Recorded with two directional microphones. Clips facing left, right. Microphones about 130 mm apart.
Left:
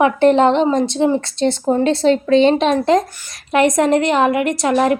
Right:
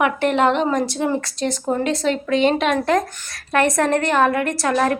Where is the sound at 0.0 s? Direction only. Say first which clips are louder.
Left 5 dB; 30° left (ahead or behind).